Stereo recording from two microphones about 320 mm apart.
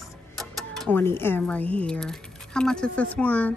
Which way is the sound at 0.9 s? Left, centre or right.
Centre.